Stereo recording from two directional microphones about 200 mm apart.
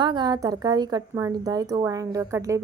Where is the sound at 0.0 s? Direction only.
20° right (ahead or behind).